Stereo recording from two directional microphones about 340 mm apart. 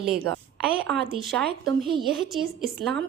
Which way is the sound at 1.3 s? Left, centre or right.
Centre.